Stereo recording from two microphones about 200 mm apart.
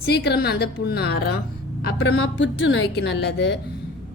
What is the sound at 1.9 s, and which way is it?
A woman's voice, 85° left.